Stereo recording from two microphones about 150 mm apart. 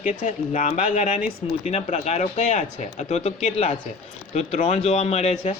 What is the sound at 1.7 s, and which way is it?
A man's voice, 45° left (ahead or behind).